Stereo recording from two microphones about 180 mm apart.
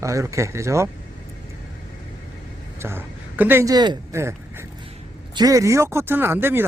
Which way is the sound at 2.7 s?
15° right (ahead or behind).